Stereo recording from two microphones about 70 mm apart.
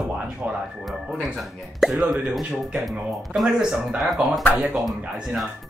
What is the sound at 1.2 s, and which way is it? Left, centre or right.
Speech, centre.